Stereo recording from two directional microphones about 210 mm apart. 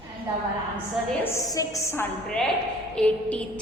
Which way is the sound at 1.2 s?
15° left (ahead or behind).